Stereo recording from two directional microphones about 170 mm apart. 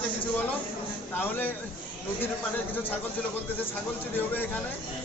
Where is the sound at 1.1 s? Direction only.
10° left (ahead or behind).